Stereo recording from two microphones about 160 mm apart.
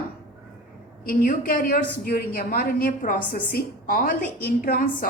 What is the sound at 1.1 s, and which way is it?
A woman's voice, 60° left (ahead or behind).